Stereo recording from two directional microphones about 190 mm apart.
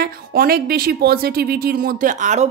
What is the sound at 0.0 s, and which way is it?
Speech, 50° right (ahead or behind).